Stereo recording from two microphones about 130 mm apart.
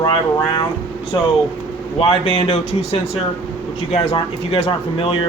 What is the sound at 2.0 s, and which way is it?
Speech, 45° left (ahead or behind).